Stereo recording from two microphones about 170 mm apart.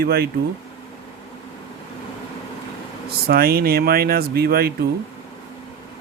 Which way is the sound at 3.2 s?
65° right (ahead or behind).